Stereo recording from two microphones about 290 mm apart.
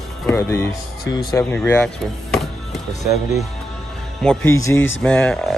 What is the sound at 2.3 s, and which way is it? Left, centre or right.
Music, centre.